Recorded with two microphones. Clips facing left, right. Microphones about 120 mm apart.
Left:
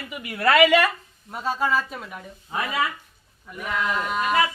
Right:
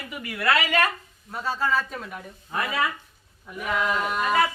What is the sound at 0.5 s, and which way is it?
Speech, 70° left (ahead or behind).